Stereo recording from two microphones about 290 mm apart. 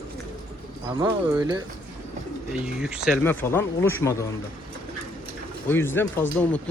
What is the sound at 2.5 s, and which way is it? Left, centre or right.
Speech, centre.